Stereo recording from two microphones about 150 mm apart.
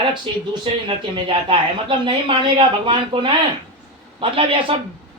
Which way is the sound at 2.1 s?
35° right (ahead or behind).